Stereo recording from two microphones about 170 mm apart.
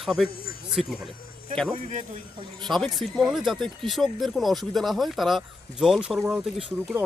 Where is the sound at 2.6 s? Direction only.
Centre (ahead or behind).